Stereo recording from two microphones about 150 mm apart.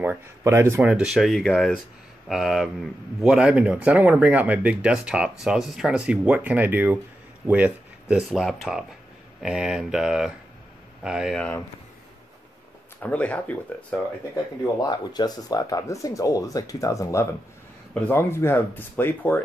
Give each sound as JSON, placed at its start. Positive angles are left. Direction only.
{"t": 0.0, "sound": "speech", "side_deg": -15}
{"t": 0.7, "sound": "speech", "side_deg": -5}
{"t": 13.0, "sound": "speech", "side_deg": 10}
{"t": 14.3, "sound": "speech", "side_deg": 25}